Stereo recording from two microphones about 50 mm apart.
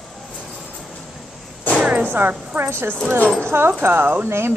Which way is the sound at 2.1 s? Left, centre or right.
Right.